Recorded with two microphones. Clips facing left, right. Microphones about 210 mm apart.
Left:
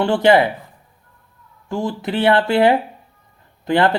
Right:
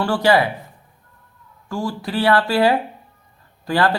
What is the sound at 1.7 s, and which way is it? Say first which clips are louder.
Speech: left 2 dB; 20° left (ahead or behind).